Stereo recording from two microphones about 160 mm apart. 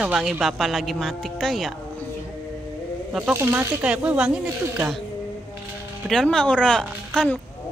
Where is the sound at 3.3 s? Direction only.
15° right (ahead or behind).